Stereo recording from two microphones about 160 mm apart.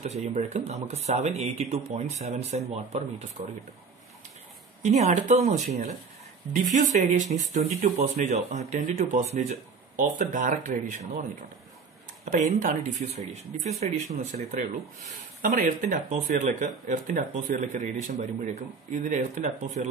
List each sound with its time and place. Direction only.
0.0 s speech: 45° right (ahead or behind)
4.8 s speech: 45° right (ahead or behind)
12.3 s speech: 50° right (ahead or behind)